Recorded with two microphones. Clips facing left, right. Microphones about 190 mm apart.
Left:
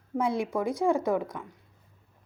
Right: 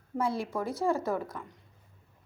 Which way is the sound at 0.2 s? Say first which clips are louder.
Left 3 dB; 20° left (ahead or behind).